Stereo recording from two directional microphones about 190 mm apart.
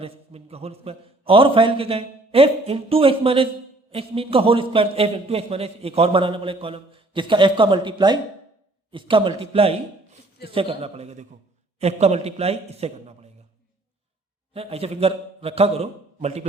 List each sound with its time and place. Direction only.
0.0 s a man's voice: 30° right (ahead or behind)
14.5 s a man's voice: 30° right (ahead or behind)